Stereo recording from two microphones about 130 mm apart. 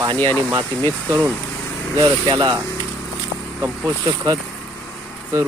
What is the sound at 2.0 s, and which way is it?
Speech, 35° right (ahead or behind).